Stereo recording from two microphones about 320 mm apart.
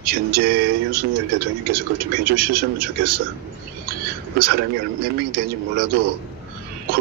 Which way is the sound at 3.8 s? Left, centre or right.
Right.